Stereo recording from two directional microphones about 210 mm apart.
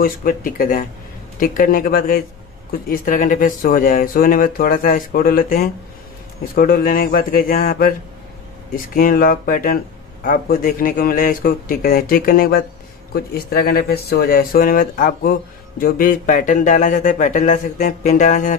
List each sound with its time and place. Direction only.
0.0 s speech: 40° left (ahead or behind)
8.9 s speech: 40° left (ahead or behind)